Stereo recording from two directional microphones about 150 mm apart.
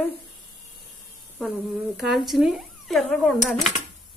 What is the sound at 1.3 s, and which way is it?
Speech, 5° right (ahead or behind).